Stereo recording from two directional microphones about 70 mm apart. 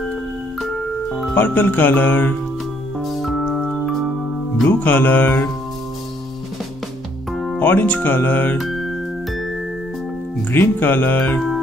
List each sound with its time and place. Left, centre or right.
0.6 s music: centre
1.3 s speech: left
3.0 s music: centre
3.4 s music: centre
3.7 s music: centre
4.6 s speech: left
7.5 s speech: left
8.5 s music: centre
10.5 s speech: left